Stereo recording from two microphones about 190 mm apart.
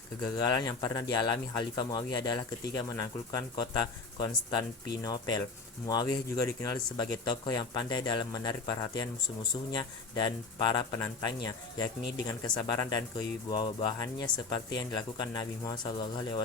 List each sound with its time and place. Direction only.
0.3 s speech: 20° left (ahead or behind)
12.3 s speech: 20° left (ahead or behind)